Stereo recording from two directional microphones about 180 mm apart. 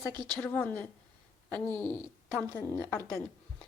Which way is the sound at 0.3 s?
5° left (ahead or behind).